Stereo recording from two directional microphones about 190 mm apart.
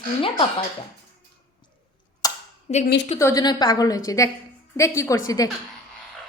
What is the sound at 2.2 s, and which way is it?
Clapping, 20° left (ahead or behind).